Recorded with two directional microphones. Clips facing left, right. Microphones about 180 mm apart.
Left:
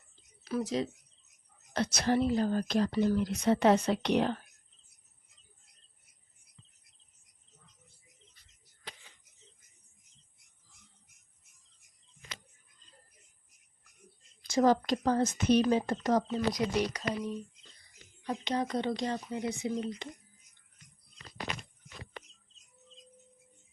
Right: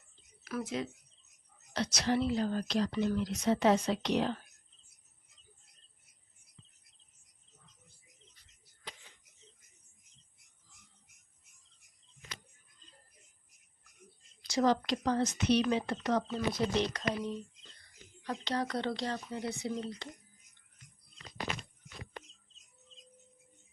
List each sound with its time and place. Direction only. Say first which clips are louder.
0.4 s speech: left 4 dB; 35° left (ahead or behind)
1.7 s a woman's voice: left 3 dB; 55° left (ahead or behind)
2.9 s speech: left 4 dB; 35° left (ahead or behind)
3.2 s speech: left 3 dB; 55° left (ahead or behind)
14.4 s a woman's voice: left 3 dB; 50° left (ahead or behind)
16.6 s speech: left 1 dB; 10° left (ahead or behind)